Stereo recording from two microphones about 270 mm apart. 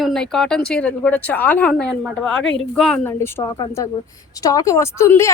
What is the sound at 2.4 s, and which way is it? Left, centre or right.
Speech, left.